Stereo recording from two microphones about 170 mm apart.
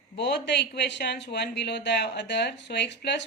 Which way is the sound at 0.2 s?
90° left.